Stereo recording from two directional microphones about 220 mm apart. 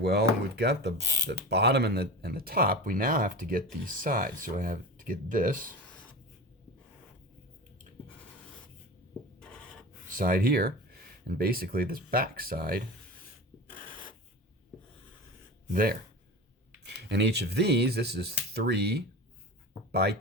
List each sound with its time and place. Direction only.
0.0 s speech: 45° right (ahead or behind)
0.9 s speech: 15° right (ahead or behind)
1.3 s speech: 50° right (ahead or behind)
9.4 s printer: 5° left (ahead or behind)
10.1 s speech: 40° right (ahead or behind)
13.7 s a sound: 40° left (ahead or behind)
15.7 s speech: 40° right (ahead or behind)